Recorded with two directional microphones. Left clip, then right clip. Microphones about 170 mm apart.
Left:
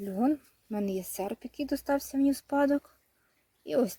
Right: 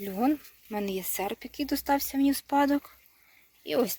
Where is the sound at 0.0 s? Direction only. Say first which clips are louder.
Right 2 dB; 25° left (ahead or behind).